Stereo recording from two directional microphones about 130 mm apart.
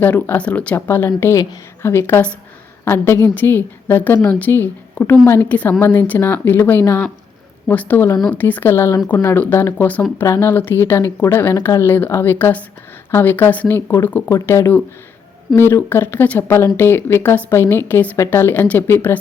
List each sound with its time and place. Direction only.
0.0 s a woman's voice: 15° left (ahead or behind)